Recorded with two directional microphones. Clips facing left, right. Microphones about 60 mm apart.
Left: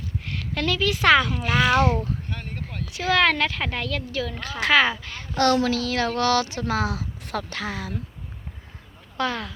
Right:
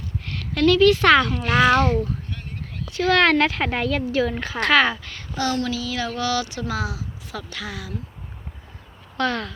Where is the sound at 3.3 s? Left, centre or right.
Centre; by 4.6 s right.